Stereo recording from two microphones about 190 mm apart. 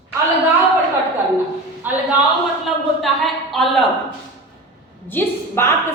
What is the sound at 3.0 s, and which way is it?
Speech, centre (ahead or behind).